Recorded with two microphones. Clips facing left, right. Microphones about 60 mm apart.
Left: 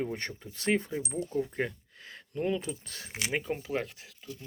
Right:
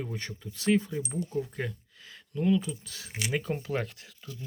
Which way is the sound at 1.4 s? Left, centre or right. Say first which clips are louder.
Left 2 dB; left.